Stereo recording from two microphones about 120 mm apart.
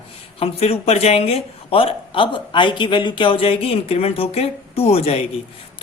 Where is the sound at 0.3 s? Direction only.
55° left (ahead or behind).